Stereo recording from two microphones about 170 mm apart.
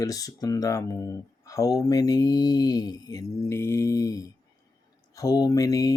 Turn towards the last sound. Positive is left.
turn(degrees=20)  # may be behind; listen again after turning